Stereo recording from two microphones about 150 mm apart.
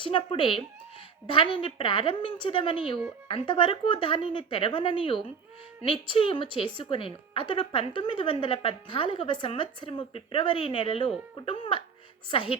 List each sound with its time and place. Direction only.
0.0 s a woman's voice: 35° left (ahead or behind)